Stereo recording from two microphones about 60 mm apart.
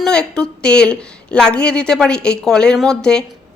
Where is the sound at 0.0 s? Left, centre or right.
Centre.